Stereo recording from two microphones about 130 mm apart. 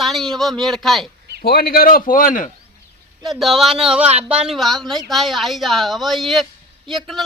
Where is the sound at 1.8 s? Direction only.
90° left.